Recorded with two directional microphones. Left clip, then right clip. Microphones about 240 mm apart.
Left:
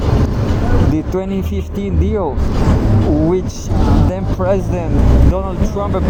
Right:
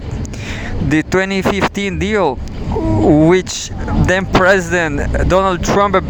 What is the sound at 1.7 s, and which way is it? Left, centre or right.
Speech, right.